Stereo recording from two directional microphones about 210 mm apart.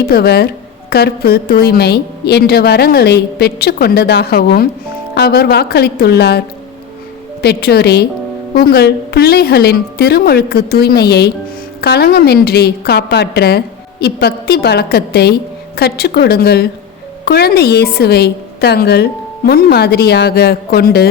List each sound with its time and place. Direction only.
0.1 s a woman's voice: 50° left (ahead or behind)
7.4 s a woman's voice: 50° left (ahead or behind)